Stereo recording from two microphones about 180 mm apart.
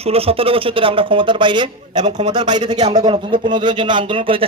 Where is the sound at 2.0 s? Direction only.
40° right (ahead or behind).